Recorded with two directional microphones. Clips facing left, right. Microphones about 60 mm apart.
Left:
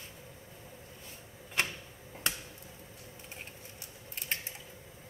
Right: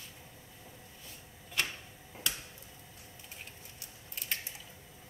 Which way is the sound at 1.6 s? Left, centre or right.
Left.